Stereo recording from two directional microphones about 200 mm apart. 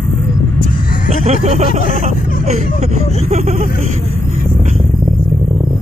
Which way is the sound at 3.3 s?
35° right (ahead or behind).